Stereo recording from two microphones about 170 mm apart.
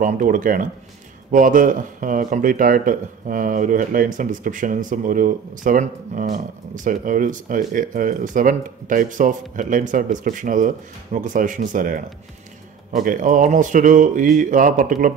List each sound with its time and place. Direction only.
0.0 s a man's voice: 50° right (ahead or behind)